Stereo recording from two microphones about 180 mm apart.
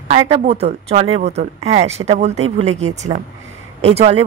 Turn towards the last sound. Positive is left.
turn(degrees=-35)  # may be behind; listen again after turning